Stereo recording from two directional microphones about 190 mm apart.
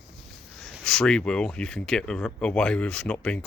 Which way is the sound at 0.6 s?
5° left (ahead or behind).